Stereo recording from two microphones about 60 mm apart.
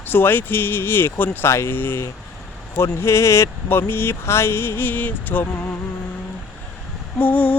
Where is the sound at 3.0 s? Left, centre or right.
Left.